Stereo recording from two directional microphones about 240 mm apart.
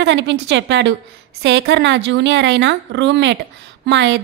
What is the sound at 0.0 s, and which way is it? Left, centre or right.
A woman's voice, right.